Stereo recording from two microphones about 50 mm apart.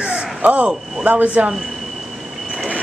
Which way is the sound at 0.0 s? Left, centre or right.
Right.